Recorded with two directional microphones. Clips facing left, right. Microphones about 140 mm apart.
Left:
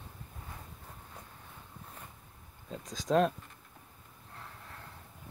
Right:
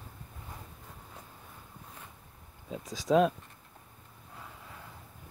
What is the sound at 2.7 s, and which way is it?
Speech, 5° right (ahead or behind).